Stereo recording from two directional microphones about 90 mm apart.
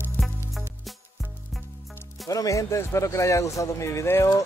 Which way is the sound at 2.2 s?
40° left (ahead or behind).